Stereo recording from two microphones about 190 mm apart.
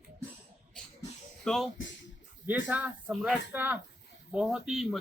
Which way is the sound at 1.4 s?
Centre (ahead or behind).